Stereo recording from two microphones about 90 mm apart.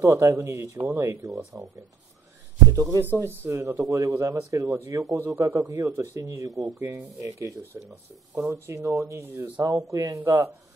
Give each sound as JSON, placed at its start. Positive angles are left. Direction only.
{"t": 0.0, "sound": "speech", "side_deg": -35}
{"t": 2.7, "sound": "speech", "side_deg": -40}
{"t": 3.0, "sound": "speech", "side_deg": -25}